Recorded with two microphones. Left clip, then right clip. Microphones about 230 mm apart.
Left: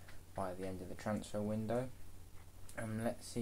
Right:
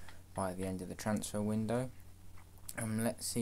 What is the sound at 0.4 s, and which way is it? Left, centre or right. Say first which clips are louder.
Speech: right 4 dB; right.